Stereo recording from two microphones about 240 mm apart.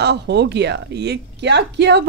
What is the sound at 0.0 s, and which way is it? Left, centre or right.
Speech, right.